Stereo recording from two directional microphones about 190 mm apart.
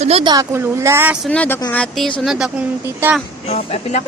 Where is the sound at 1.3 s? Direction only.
10° left (ahead or behind).